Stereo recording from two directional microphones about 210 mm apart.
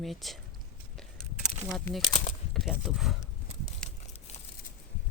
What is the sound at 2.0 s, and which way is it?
Speech, 30° left (ahead or behind).